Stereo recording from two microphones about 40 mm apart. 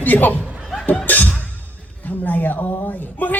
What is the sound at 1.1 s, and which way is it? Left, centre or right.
Music, left.